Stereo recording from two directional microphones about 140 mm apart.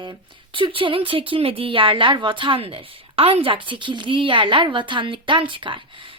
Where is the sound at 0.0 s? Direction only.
35° right (ahead or behind).